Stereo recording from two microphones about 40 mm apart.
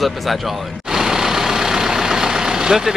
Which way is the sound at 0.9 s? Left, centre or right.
Centre.